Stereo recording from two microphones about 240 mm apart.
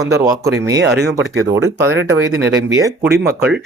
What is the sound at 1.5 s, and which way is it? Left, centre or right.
Speech, centre.